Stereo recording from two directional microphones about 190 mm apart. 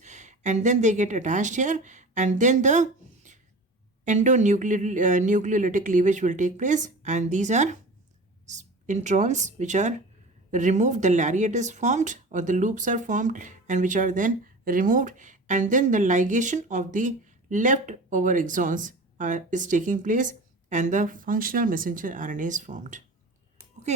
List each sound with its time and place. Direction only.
0.0 s a woman's voice: 40° right (ahead or behind)